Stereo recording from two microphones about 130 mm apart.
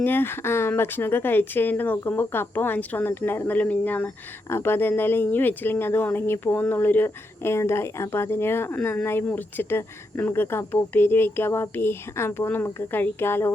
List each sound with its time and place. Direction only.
0.0 s speech: 15° left (ahead or behind)